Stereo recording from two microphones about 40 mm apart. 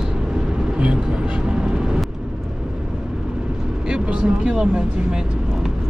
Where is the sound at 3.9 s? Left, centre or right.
Right.